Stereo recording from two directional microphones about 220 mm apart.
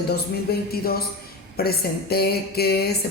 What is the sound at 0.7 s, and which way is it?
Speech, 45° left (ahead or behind).